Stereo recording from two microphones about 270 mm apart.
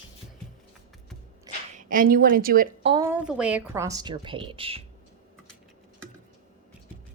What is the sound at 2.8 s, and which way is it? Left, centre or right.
A woman's voice, centre.